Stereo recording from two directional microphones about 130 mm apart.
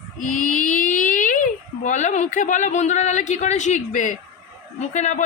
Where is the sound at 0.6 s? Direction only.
90° left.